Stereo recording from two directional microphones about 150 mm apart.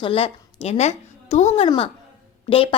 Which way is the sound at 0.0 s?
40° left (ahead or behind).